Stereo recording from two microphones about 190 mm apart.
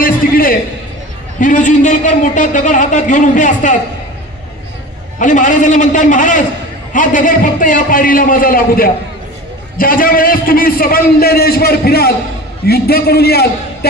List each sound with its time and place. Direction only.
0.0 s a sound: 50° left (ahead or behind)
1.4 s a man's voice: 40° left (ahead or behind)
5.2 s a man's voice: 40° left (ahead or behind); by 13.5 s 55° left (ahead or behind)